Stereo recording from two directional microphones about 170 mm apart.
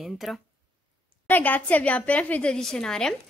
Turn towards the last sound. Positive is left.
turn(degrees=5)  # may be behind; listen again after turning